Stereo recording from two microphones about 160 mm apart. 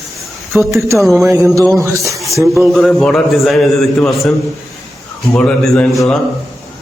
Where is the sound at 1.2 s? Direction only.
20° right (ahead or behind).